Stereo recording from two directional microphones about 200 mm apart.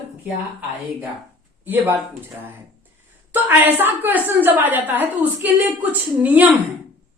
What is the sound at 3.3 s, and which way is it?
A woman's voice, 10° right (ahead or behind).